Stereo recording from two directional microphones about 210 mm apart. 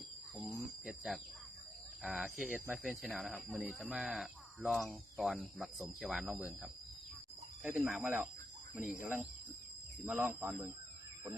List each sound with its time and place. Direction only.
0.3 s cricket: 5° right (ahead or behind)
2.0 s speech: centre (ahead or behind)